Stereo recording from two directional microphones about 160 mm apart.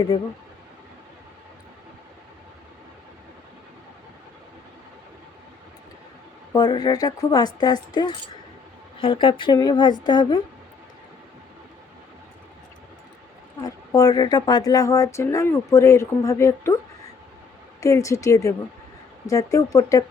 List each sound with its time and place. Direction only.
6.5 s speech: 25° left (ahead or behind)
13.7 s speech: 20° left (ahead or behind)
17.7 s speech: 20° left (ahead or behind)